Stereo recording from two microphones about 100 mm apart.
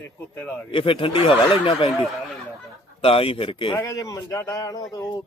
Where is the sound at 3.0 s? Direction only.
70° left (ahead or behind).